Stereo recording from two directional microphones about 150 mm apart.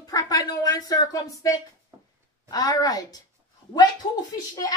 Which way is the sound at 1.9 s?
20° right (ahead or behind).